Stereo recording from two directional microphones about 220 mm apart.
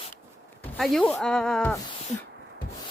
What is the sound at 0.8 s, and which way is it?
Speech, centre (ahead or behind).